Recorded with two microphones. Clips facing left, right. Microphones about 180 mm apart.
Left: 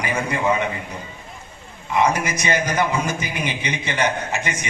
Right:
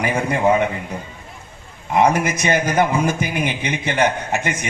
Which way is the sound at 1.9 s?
55° right (ahead or behind).